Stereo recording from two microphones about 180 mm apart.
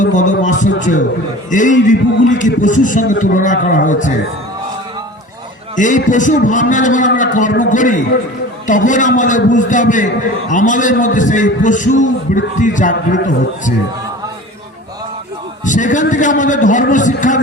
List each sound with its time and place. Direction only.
0.0 s a man's voice: 45° left (ahead or behind)
5.7 s a man's voice: 45° left (ahead or behind)
15.6 s a man's voice: 45° left (ahead or behind)